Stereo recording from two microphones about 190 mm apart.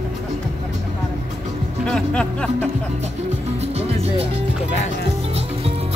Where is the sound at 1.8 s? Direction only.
5° left (ahead or behind).